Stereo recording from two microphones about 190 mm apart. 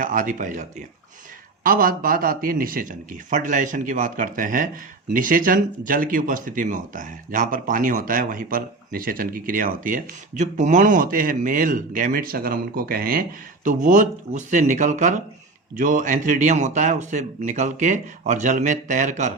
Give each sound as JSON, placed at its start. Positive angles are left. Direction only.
{"t": 0.0, "sound": "speech", "side_deg": -45}